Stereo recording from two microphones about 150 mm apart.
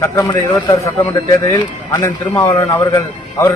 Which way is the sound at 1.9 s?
20° left (ahead or behind).